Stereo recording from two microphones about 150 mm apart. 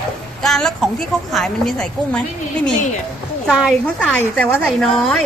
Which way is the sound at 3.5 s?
5° right (ahead or behind).